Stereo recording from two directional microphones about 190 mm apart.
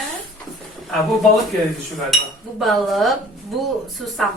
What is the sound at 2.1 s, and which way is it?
A woman's voice, centre (ahead or behind).